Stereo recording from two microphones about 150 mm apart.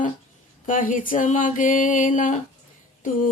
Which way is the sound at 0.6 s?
60° left (ahead or behind).